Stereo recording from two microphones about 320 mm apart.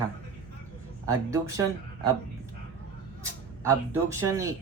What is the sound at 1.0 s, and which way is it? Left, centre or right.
Speech, centre.